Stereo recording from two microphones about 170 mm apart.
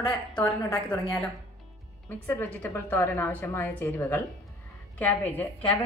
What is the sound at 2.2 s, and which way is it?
A woman's voice, 10° left (ahead or behind).